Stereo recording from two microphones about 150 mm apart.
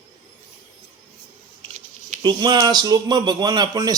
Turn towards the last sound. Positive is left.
turn(degrees=-25)  # may be behind; listen again after turning